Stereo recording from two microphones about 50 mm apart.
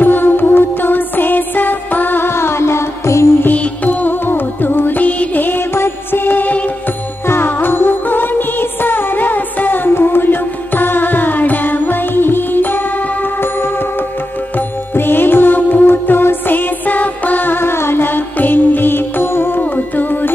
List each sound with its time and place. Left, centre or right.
0.0 s music: left
3.5 s music: left
7.2 s music: left
15.0 s music: left
17.6 s music: left